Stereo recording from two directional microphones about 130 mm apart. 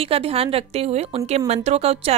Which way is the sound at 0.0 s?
50° right (ahead or behind).